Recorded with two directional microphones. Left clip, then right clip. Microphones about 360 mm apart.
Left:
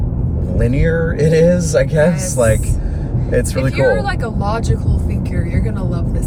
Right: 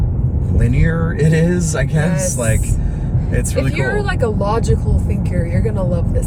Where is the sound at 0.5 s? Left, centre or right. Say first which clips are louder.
Left 4 dB; centre.